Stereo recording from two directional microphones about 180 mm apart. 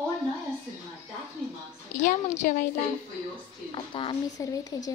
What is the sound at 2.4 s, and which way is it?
Speech, 45° left (ahead or behind).